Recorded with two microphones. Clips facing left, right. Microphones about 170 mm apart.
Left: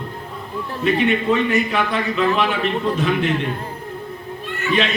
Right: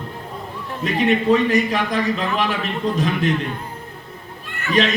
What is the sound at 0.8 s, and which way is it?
A man's voice, 40° right (ahead or behind).